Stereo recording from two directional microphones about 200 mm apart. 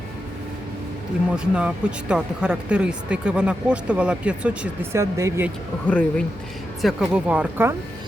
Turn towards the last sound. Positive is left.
turn(degrees=-10)  # may be behind; listen again after turning